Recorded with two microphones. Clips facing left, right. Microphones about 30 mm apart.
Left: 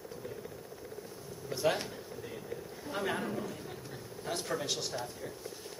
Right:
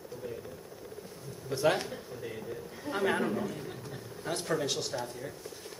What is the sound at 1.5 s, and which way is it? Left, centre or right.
Speech, centre.